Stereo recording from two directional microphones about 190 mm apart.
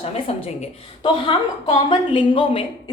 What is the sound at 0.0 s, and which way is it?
A woman's voice, 30° left (ahead or behind).